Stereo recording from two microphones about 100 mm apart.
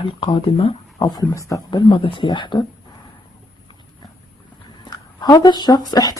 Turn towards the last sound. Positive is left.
turn(degrees=40)  # may be behind; listen again after turning